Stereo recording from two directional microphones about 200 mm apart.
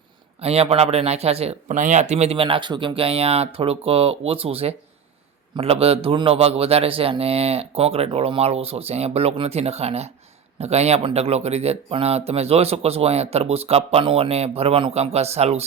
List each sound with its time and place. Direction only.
0.4 s speech: 30° right (ahead or behind)